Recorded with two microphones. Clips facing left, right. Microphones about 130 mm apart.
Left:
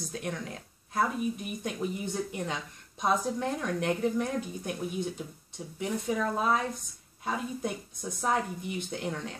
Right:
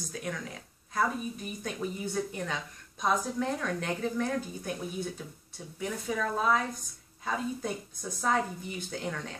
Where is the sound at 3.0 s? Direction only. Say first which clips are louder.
Left 1 dB; 25° left (ahead or behind).